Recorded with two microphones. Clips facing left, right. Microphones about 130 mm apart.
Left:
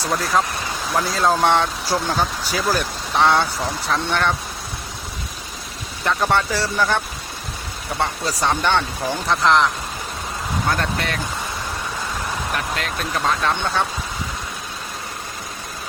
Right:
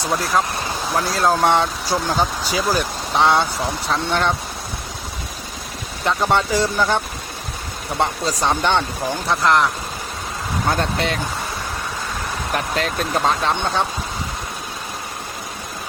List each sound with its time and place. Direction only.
0.9 s speech: centre (ahead or behind)
6.1 s speech: 15° right (ahead or behind)
10.7 s speech: 25° right (ahead or behind)
12.5 s speech: 35° right (ahead or behind)
13.5 s speech: 15° right (ahead or behind)